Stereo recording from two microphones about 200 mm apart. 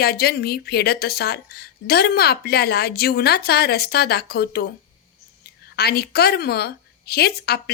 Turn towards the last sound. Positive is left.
turn(degrees=50)  # may be behind; listen again after turning